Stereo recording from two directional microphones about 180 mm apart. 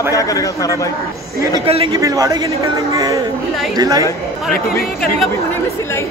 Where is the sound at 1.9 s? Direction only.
20° right (ahead or behind).